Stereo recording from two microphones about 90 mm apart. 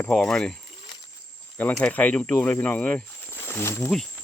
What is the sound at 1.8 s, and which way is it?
Speech, 15° left (ahead or behind).